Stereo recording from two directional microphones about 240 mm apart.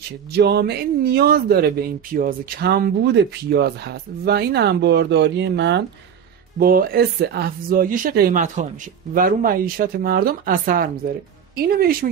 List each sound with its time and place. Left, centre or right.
0.3 s a man's voice: right